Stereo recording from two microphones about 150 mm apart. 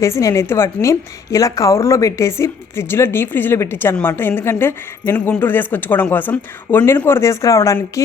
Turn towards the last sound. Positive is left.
turn(degrees=20)  # may be behind; listen again after turning